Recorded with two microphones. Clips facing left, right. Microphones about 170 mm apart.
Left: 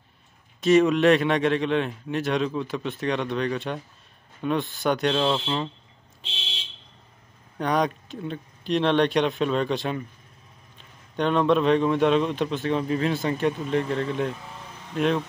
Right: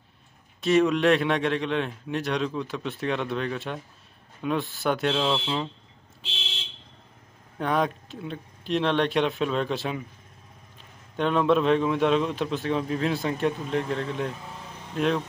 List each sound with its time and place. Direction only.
0.6 s a man's voice: centre (ahead or behind)
7.5 s a man's voice: centre (ahead or behind)
11.1 s a man's voice: centre (ahead or behind)